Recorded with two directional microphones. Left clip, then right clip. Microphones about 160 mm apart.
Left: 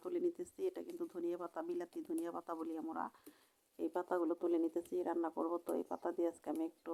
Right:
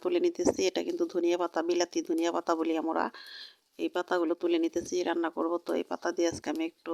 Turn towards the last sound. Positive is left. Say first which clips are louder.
# right 8 dB
turn(degrees=-40)  # may be behind; listen again after turning